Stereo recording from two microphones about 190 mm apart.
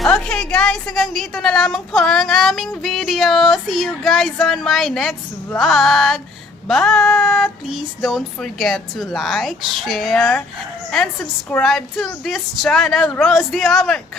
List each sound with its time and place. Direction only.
0.0 s a woman's voice: 5° left (ahead or behind)